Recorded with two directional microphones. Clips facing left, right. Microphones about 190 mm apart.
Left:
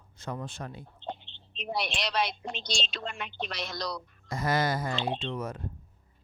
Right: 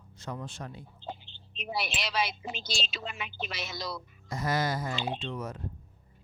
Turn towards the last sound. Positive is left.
turn(degrees=55)  # may be behind; listen again after turning